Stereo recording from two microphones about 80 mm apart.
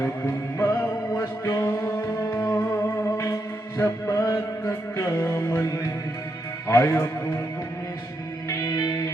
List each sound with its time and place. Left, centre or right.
0.6 s music: left
3.8 s music: left
6.7 s speech: left
8.4 s music: left